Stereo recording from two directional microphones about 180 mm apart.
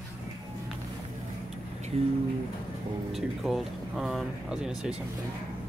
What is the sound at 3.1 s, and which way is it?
Speech, centre (ahead or behind).